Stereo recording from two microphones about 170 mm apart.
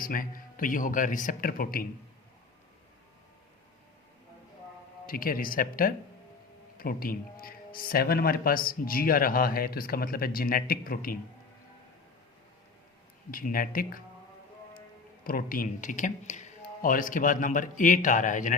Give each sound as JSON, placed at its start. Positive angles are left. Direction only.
{"t": 0.0, "sound": "speech", "side_deg": 55}
{"t": 5.0, "sound": "speech", "side_deg": 55}
{"t": 13.3, "sound": "speech", "side_deg": 55}
{"t": 15.2, "sound": "speech", "side_deg": 60}